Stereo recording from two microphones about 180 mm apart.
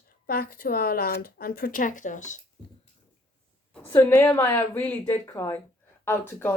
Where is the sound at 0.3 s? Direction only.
55° left (ahead or behind).